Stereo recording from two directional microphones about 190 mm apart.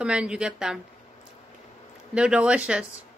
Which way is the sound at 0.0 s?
5° right (ahead or behind).